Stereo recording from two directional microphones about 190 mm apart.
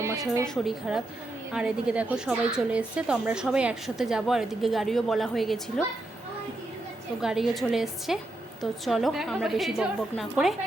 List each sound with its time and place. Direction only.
0.0 s a woman's voice: 15° right (ahead or behind)
0.4 s a woman's voice: centre (ahead or behind)
7.2 s a woman's voice: centre (ahead or behind)